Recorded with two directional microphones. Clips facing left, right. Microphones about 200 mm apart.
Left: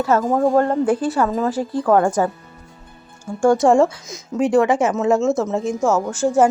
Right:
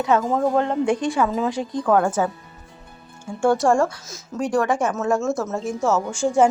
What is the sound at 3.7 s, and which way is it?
Speech, 20° left (ahead or behind).